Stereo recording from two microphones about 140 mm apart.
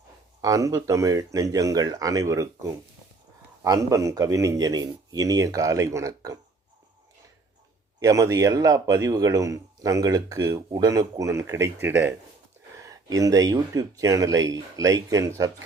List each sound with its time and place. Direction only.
0.4 s a man's voice: 25° right (ahead or behind)
7.9 s a man's voice: 25° right (ahead or behind)
12.9 s a man's voice: 25° right (ahead or behind)